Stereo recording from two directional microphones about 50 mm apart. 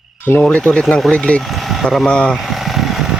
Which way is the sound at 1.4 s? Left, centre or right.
Centre.